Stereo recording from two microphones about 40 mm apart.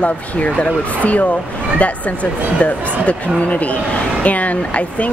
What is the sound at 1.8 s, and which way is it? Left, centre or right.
Speech, left.